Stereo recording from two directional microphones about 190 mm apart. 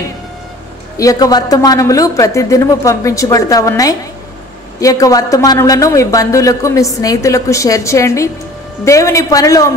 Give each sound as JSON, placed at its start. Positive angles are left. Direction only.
{"t": 0.9, "sound": "a man's voice", "side_deg": 20}